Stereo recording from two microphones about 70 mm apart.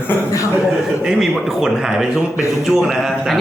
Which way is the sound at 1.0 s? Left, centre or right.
Centre.